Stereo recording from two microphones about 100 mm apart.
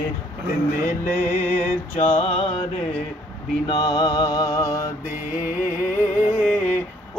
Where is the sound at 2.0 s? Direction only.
90° left.